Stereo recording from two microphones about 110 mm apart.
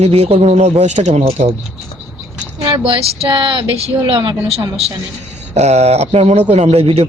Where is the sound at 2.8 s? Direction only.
50° right (ahead or behind).